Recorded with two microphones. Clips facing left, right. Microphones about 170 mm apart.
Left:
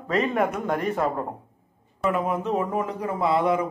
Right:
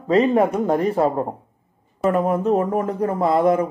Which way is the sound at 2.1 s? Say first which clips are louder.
Right 7 dB; 45° right (ahead or behind).